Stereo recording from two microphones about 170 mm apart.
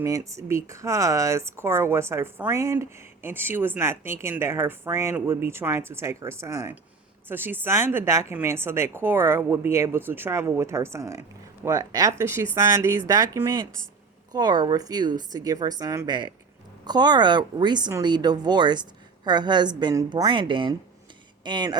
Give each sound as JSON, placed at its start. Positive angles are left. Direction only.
{"t": 0.0, "sound": "a woman's voice", "side_deg": -20}